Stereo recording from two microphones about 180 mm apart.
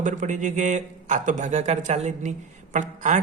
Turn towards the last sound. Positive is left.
turn(degrees=-45)  # may be behind; listen again after turning